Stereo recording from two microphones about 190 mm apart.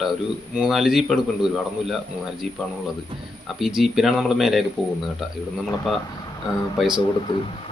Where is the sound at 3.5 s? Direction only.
Centre (ahead or behind).